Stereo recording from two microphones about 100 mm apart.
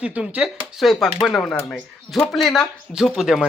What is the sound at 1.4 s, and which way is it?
Speech, 10° left (ahead or behind).